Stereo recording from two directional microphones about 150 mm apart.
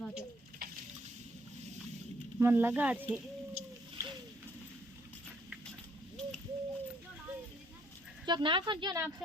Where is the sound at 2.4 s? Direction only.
15° right (ahead or behind).